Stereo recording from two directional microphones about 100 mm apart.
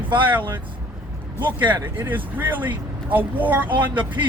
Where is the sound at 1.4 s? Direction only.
55° right (ahead or behind).